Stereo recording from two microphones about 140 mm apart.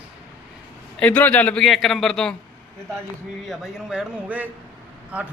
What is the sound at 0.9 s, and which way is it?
A man's voice, 10° left (ahead or behind).